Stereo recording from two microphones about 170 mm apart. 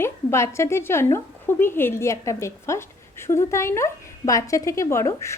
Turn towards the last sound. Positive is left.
turn(degrees=15)  # may be behind; listen again after turning